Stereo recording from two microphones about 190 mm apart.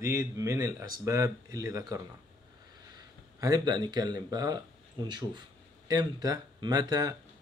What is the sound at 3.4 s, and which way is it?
A man's voice, 20° right (ahead or behind).